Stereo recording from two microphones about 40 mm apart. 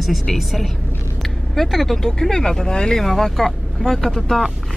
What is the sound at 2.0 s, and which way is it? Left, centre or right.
Speech, centre.